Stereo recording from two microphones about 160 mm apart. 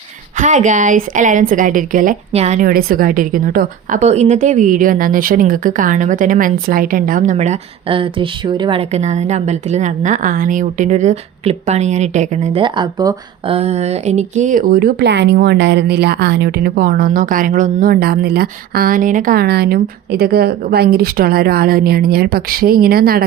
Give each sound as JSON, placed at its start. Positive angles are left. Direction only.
{"t": 0.3, "sound": "speech", "side_deg": -50}
{"t": 2.3, "sound": "speech", "side_deg": -40}
{"t": 2.6, "sound": "a woman's voice", "side_deg": -65}
{"t": 4.0, "sound": "speech", "side_deg": -45}
{"t": 8.9, "sound": "speech", "side_deg": -45}
{"t": 12.6, "sound": "speech", "side_deg": -30}
{"t": 13.5, "sound": "speech", "side_deg": -40}